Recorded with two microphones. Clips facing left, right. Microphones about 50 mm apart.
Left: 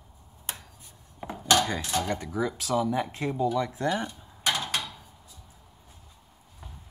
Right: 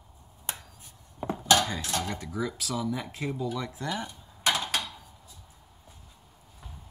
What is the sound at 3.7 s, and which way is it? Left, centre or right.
Dishes, centre.